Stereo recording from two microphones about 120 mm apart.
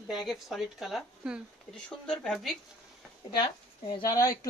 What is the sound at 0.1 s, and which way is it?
Speech, centre (ahead or behind).